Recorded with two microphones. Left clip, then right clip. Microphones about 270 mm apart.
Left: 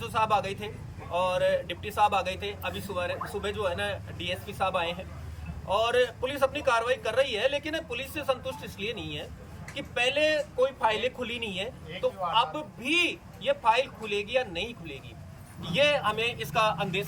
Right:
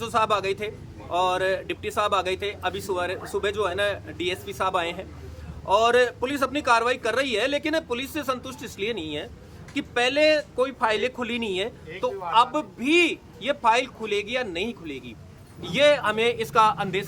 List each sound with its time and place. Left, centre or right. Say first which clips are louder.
0.0 s speech: right 3 dB; centre